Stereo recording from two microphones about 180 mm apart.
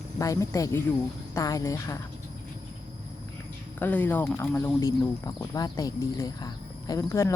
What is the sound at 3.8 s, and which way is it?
Speech, 10° left (ahead or behind).